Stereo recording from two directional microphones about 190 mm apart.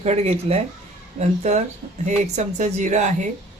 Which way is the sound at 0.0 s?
35° right (ahead or behind).